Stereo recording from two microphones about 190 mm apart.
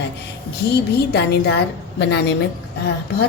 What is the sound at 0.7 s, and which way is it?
A woman's voice, 60° left (ahead or behind).